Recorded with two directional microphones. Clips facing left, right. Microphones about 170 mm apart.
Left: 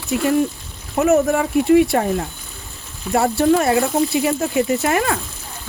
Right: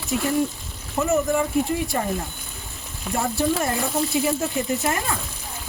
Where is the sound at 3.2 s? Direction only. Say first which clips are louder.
Left 7 dB; 70° left (ahead or behind).